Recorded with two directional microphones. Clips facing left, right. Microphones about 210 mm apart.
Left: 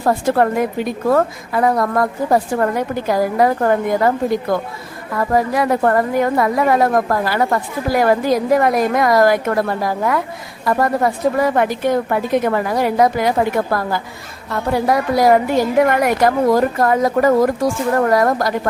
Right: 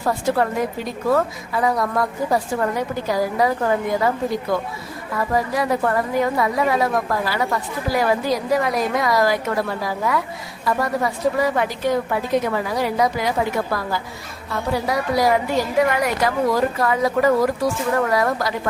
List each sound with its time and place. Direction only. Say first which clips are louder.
0.0 s a woman's voice: left 5 dB; 50° left (ahead or behind)
5.1 s a woman's voice: left 5 dB; 50° left (ahead or behind)